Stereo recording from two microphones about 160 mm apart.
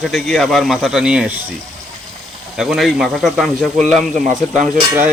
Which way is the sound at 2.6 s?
Centre (ahead or behind).